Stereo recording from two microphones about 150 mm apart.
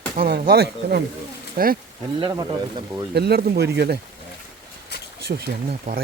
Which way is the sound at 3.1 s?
90° right.